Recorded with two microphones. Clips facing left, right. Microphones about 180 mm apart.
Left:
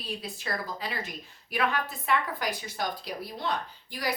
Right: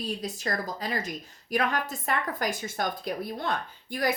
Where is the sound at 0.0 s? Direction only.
40° right (ahead or behind).